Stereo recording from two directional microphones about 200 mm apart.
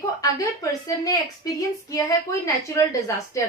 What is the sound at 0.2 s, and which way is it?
A woman's voice, 15° left (ahead or behind).